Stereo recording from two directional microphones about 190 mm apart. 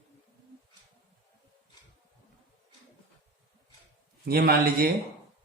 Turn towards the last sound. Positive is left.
turn(degrees=-55)  # may be behind; listen again after turning